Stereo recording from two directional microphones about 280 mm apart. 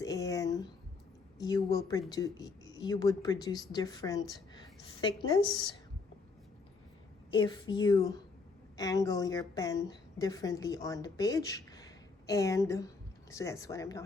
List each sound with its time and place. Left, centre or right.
0.0 s a sound: centre
1.4 s speech: centre
7.3 s speech: centre